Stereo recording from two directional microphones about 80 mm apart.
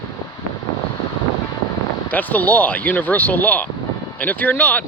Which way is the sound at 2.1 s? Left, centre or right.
Left.